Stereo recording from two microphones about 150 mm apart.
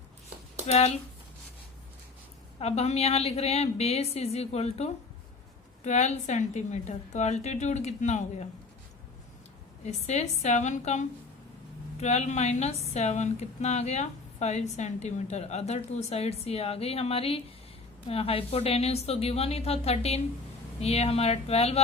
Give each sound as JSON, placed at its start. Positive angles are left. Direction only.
{"t": 0.7, "sound": "speech", "side_deg": 45}
{"t": 2.6, "sound": "speech", "side_deg": 45}
{"t": 9.8, "sound": "speech", "side_deg": 50}